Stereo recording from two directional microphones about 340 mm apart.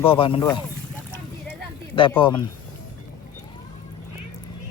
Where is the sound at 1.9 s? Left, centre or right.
Centre.